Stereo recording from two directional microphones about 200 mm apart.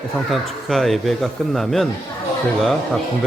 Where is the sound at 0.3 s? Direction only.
Centre (ahead or behind).